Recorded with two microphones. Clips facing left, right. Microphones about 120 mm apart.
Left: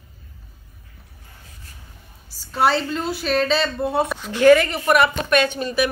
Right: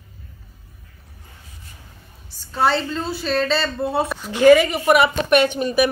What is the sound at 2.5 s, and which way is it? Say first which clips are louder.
Speech: even; 5° left (ahead or behind).